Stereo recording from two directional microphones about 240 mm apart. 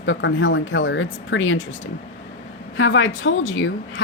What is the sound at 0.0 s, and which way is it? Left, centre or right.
Speech, left.